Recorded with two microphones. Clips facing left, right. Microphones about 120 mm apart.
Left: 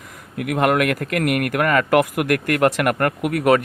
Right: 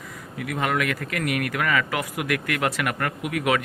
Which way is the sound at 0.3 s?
60° left (ahead or behind).